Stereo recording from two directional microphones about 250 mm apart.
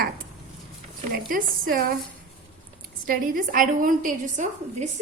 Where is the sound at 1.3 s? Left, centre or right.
Right.